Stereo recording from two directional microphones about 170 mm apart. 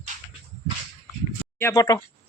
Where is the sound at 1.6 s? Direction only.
20° left (ahead or behind).